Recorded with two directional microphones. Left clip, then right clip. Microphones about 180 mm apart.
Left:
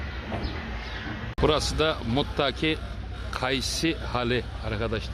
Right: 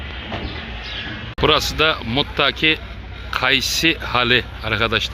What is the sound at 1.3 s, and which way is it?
Speech, 5° left (ahead or behind).